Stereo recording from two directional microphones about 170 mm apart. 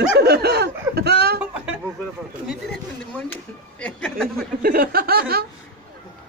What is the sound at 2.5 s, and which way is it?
Speech, 5° left (ahead or behind).